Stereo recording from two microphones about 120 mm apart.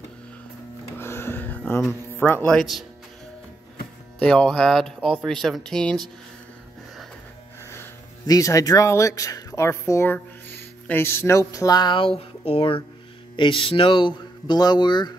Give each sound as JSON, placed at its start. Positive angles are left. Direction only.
{"t": 0.9, "sound": "music", "side_deg": 20}
{"t": 1.9, "sound": "speech", "side_deg": 15}
{"t": 4.2, "sound": "speech", "side_deg": 5}
{"t": 8.3, "sound": "speech", "side_deg": 30}